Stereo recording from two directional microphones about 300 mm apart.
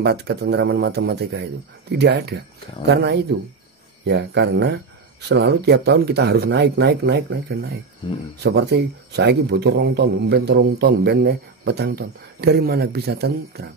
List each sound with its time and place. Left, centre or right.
0.0 s a man's voice: right
8.0 s speech: centre
8.4 s a man's voice: right